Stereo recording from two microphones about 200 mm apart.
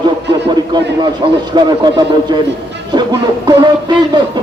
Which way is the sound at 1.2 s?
25° right (ahead or behind).